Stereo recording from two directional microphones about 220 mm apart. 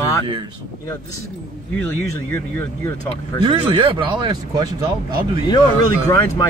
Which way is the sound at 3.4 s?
25° right (ahead or behind).